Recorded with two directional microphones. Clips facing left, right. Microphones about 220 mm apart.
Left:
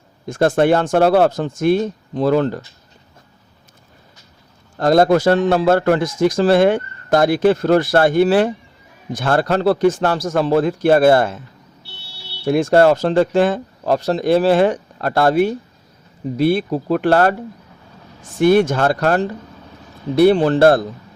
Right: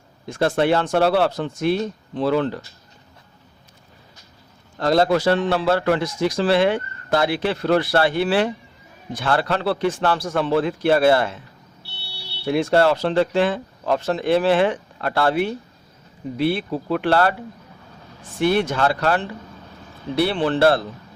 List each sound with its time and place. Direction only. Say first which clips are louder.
0.3 s a man's voice: left 5 dB; 45° left (ahead or behind)
4.8 s a man's voice: left 5 dB; 45° left (ahead or behind)
12.5 s a man's voice: left 5 dB; 45° left (ahead or behind)